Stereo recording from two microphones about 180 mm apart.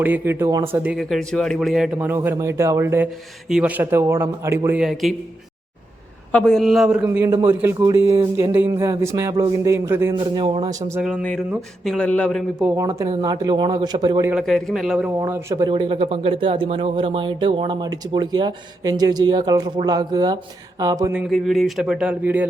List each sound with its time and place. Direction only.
0.0 s a man's voice: 10° right (ahead or behind)
4.8 s speech: centre (ahead or behind)
6.3 s a man's voice: 5° left (ahead or behind); by 10.2 s 15° right (ahead or behind)
10.2 s speech: 25° right (ahead or behind)
11.0 s speech: centre (ahead or behind)
12.6 s a man's voice: 15° right (ahead or behind)
14.3 s speech: centre (ahead or behind); by 15.7 s 15° right (ahead or behind)
15.7 s speech: 30° right (ahead or behind)
21.1 s speech: 5° right (ahead or behind)